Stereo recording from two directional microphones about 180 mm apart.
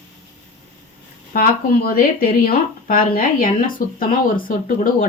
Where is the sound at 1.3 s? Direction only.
50° left (ahead or behind).